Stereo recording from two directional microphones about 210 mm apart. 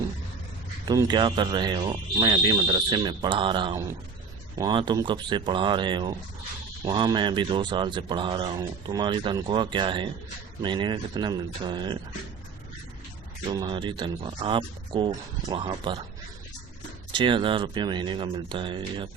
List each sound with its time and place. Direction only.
0.9 s speech: 20° right (ahead or behind)
13.5 s speech: 20° right (ahead or behind)
17.1 s speech: 20° right (ahead or behind)